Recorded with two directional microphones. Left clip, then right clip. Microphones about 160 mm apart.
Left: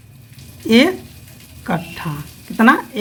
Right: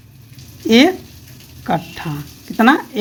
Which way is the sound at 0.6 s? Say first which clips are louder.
Right 2 dB; 20° right (ahead or behind).